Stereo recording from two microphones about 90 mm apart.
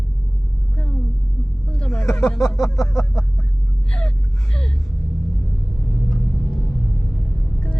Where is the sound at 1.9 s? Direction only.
30° left (ahead or behind).